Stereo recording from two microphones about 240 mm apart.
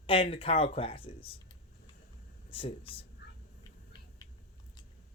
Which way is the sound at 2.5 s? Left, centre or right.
Left.